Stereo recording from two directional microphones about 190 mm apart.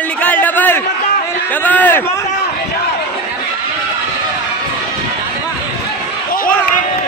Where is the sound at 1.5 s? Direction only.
10° left (ahead or behind).